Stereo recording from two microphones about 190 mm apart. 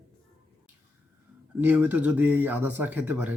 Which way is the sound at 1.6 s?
10° right (ahead or behind).